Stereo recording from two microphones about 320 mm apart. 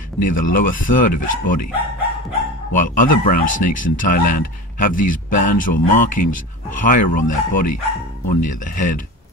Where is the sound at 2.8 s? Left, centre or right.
Left.